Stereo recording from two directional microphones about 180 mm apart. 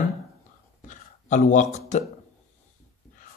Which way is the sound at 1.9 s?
40° left (ahead or behind).